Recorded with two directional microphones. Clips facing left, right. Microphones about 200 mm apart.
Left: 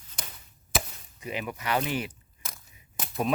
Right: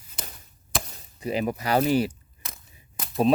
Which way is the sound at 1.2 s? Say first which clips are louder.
Right 7 dB; 35° right (ahead or behind).